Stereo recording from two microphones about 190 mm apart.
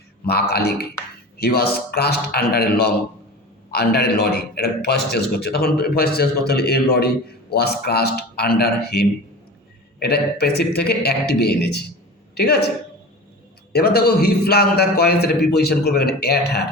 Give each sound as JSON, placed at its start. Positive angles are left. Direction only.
{"t": 0.3, "sound": "a man's voice", "side_deg": 55}
{"t": 13.7, "sound": "a man's voice", "side_deg": 55}